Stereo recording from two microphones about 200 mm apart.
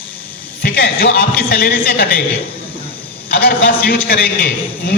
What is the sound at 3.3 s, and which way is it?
A man's voice, 50° left (ahead or behind).